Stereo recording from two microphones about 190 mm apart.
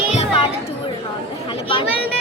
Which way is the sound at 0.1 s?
35° left (ahead or behind).